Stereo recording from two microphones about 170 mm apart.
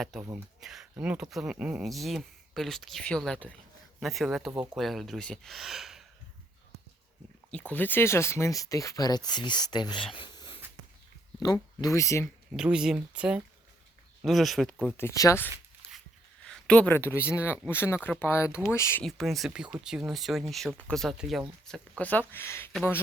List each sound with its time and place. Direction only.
0.0 s speech: centre (ahead or behind)
7.7 s speech: 10° left (ahead or behind)
12.5 s speech: 5° right (ahead or behind)
15.0 s speech: 20° left (ahead or behind)
19.0 s speech: centre (ahead or behind)